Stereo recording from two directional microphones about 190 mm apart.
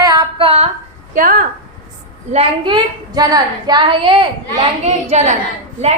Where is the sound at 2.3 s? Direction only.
25° right (ahead or behind).